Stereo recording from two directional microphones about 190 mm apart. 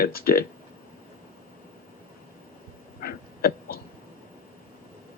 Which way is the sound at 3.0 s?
50° left (ahead or behind).